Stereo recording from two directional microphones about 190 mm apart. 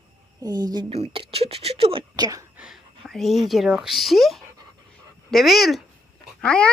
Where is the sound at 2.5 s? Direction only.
5° right (ahead or behind).